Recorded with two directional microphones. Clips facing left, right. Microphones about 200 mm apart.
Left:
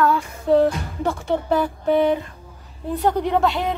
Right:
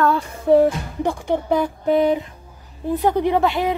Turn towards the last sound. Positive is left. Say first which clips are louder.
# right 2 dB
turn(degrees=-5)  # may be behind; listen again after turning